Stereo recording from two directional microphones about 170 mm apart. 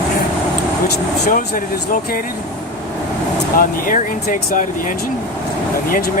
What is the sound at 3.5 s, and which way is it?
Speech, 50° left (ahead or behind).